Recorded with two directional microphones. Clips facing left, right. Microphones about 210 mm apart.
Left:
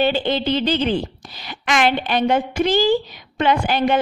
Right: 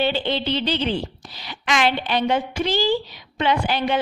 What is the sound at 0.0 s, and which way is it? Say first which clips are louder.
A woman's voice: left 3 dB; 45° left (ahead or behind).